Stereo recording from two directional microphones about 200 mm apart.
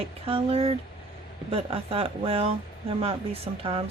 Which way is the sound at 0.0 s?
30° right (ahead or behind).